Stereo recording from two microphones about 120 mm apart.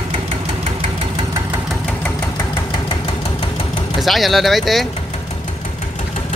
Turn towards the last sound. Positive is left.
turn(degrees=0)  # may be behind; listen again after turning